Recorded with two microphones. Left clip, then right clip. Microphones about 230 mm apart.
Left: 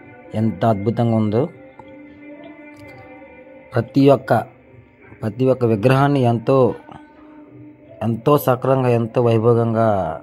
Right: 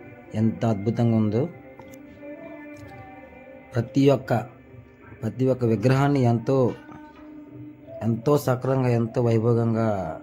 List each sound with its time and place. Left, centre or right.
0.3 s speech: centre
3.7 s speech: centre
8.0 s speech: centre